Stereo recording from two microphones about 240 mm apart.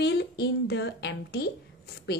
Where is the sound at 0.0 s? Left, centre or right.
Left.